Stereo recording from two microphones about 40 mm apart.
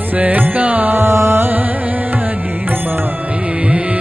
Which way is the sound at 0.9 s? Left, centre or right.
Right.